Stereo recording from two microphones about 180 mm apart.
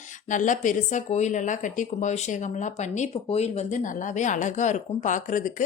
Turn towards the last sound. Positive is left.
turn(degrees=45)  # may be behind; listen again after turning